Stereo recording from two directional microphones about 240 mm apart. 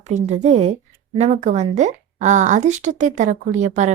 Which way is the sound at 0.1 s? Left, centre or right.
Right.